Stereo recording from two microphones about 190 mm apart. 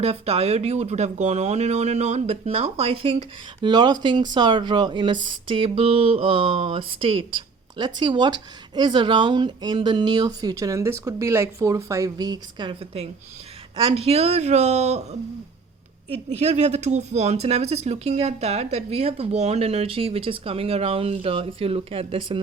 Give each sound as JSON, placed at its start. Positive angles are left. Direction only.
{"t": 0.0, "sound": "speech", "side_deg": -35}
{"t": 16.0, "sound": "speech", "side_deg": -35}